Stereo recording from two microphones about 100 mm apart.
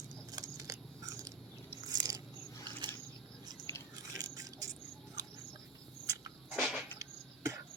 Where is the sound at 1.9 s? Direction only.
40° right (ahead or behind).